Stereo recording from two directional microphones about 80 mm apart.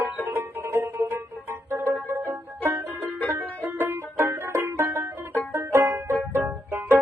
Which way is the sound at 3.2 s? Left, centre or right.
Right.